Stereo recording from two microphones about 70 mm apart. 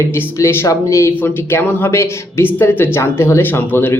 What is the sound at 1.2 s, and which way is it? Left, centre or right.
Speech, left.